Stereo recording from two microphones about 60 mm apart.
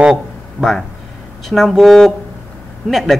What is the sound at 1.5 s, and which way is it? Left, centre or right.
Speech, centre.